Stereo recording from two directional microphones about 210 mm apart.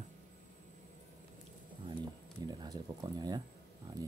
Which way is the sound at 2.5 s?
20° right (ahead or behind).